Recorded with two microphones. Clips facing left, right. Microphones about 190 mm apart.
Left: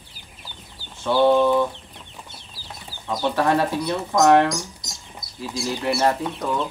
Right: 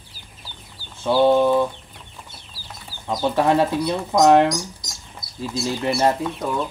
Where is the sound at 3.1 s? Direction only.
20° right (ahead or behind).